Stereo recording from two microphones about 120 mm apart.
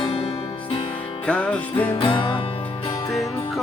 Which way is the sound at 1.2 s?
10° left (ahead or behind).